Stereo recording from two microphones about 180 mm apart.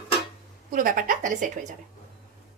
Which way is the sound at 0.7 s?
50° right (ahead or behind).